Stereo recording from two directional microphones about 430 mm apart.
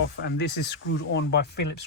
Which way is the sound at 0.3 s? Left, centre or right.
Left.